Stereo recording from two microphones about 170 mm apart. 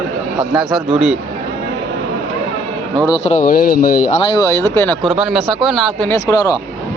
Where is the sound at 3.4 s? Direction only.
60° left (ahead or behind).